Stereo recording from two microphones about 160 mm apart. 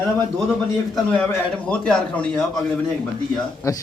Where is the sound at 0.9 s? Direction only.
5° left (ahead or behind).